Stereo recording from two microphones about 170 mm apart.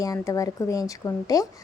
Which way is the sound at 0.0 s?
20° left (ahead or behind).